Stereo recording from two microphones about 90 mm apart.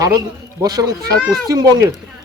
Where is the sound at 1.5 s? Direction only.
40° right (ahead or behind).